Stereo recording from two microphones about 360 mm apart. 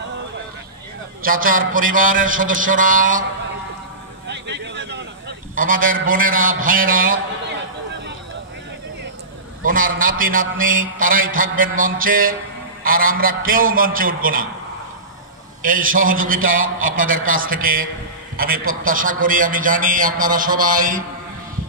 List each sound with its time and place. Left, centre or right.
1.2 s a man's voice: right
4.3 s a sound: right
5.6 s a man's voice: right
9.6 s a man's voice: right
15.6 s a man's voice: right